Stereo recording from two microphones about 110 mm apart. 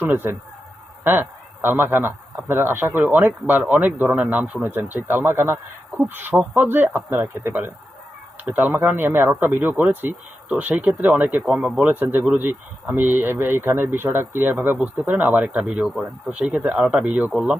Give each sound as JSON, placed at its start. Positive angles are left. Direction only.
{"t": 0.0, "sound": "speech", "side_deg": -20}
{"t": 1.0, "sound": "a sound", "side_deg": -15}
{"t": 1.8, "sound": "speech", "side_deg": -20}
{"t": 6.3, "sound": "speech", "side_deg": -5}
{"t": 6.6, "sound": "speech", "side_deg": -15}